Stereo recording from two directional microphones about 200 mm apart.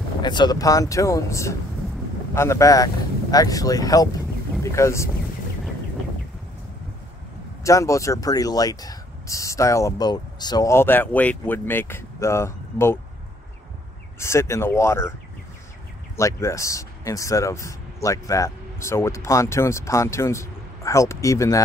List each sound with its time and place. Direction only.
0.2 s speech: 20° left (ahead or behind)
7.6 s speech: 15° left (ahead or behind)
14.2 s speech: 15° left (ahead or behind)
16.2 s speech: 15° left (ahead or behind)